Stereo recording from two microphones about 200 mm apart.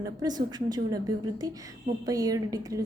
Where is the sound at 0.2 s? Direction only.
20° right (ahead or behind).